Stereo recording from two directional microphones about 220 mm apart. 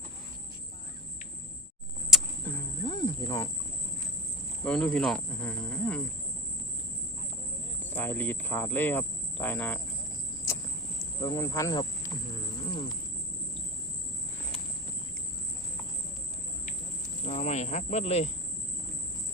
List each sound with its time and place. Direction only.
2.0 s a sound: centre (ahead or behind)
2.8 s cricket: 20° left (ahead or behind)
4.6 s speech: 5° left (ahead or behind)
7.8 s cricket: 10° left (ahead or behind)
11.2 s speech: 15° left (ahead or behind)
12.3 s wild animals: 20° left (ahead or behind)
17.2 s speech: 30° left (ahead or behind)